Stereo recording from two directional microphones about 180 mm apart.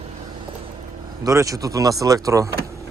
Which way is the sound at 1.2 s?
15° right (ahead or behind).